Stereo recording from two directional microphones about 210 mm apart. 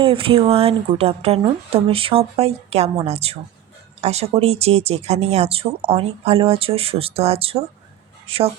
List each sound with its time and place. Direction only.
0.0 s speech: 25° right (ahead or behind)